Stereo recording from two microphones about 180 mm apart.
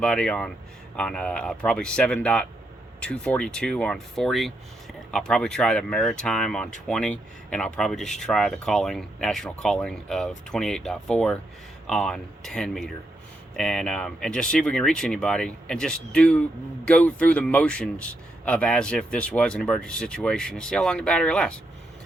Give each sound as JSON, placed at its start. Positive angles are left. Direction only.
{"t": 0.0, "sound": "speech", "side_deg": 5}